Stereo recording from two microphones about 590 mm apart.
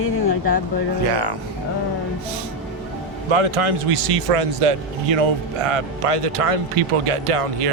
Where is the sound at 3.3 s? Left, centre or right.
Right.